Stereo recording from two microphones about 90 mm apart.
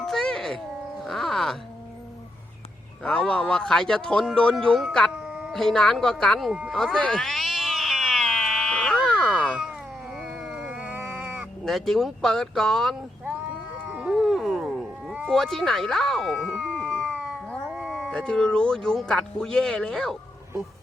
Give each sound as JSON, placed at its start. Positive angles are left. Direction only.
{"t": 0.0, "sound": "music", "side_deg": 5}
{"t": 0.9, "sound": "a sound", "side_deg": 5}
{"t": 3.0, "sound": "speech", "side_deg": 5}
{"t": 5.1, "sound": "a sound", "side_deg": -10}
{"t": 5.5, "sound": "speech", "side_deg": 5}
{"t": 6.5, "sound": "speech", "side_deg": -10}
{"t": 6.7, "sound": "cat", "side_deg": 10}
{"t": 9.5, "sound": "cat", "side_deg": -10}
{"t": 11.6, "sound": "speech", "side_deg": 5}
{"t": 13.8, "sound": "a sound", "side_deg": -15}
{"t": 14.2, "sound": "a sound", "side_deg": 0}
{"t": 15.3, "sound": "speech", "side_deg": 5}
{"t": 17.5, "sound": "cat", "side_deg": 5}
{"t": 18.1, "sound": "speech", "side_deg": 10}